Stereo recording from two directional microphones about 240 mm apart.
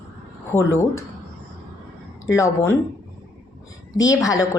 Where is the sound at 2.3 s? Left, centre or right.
Centre.